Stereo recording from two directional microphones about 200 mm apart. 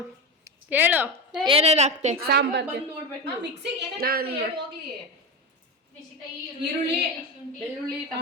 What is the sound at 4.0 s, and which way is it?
Speech, 50° right (ahead or behind).